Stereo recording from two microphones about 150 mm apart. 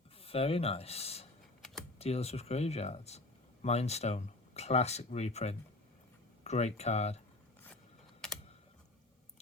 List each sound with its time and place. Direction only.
0.2 s speech: 40° left (ahead or behind)